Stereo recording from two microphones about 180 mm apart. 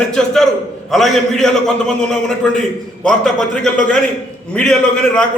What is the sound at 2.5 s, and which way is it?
A man's voice, 5° left (ahead or behind).